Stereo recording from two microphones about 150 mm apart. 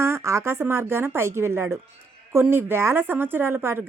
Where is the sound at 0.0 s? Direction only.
20° right (ahead or behind).